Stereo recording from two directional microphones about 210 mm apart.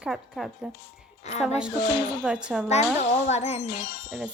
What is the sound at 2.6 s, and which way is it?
Speech, 30° left (ahead or behind).